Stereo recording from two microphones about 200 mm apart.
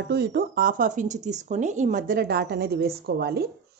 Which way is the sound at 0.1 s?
50° right (ahead or behind).